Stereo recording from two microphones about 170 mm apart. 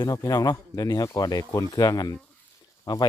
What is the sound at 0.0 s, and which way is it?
Speech, 20° left (ahead or behind).